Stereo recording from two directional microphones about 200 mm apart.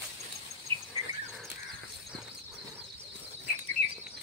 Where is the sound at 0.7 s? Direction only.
90° right.